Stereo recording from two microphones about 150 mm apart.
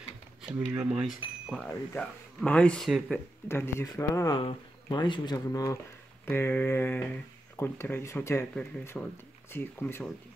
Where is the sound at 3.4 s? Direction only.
15° left (ahead or behind).